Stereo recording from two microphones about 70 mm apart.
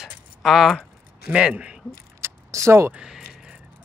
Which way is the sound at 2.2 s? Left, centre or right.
Right.